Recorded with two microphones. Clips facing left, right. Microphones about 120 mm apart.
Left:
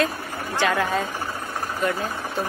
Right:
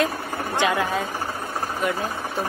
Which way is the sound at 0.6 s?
15° right (ahead or behind).